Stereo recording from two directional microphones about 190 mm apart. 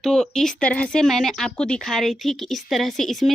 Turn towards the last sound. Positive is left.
turn(degrees=0)  # may be behind; listen again after turning